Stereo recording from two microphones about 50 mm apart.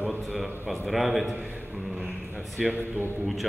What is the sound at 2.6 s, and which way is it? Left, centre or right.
Speech, centre.